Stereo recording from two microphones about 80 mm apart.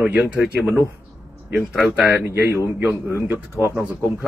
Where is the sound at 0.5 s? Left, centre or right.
Centre.